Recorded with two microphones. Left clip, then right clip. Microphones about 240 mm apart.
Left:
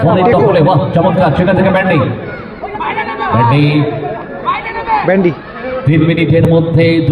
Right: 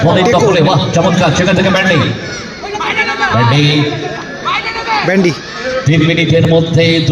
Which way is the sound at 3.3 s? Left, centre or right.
Left.